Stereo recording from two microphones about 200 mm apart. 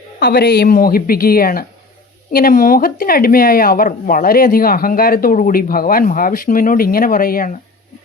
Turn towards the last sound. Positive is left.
turn(degrees=45)  # may be behind; listen again after turning